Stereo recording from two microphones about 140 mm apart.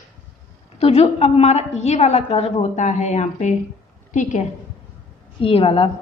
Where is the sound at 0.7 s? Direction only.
45° left (ahead or behind).